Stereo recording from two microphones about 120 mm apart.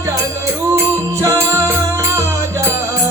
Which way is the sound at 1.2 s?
25° right (ahead or behind).